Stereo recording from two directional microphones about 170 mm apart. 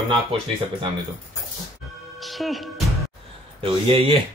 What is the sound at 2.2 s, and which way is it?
Music, centre (ahead or behind).